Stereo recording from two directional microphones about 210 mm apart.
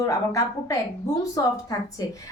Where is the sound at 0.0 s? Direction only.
15° left (ahead or behind).